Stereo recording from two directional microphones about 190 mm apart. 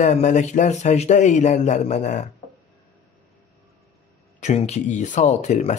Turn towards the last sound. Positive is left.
turn(degrees=40)  # may be behind; listen again after turning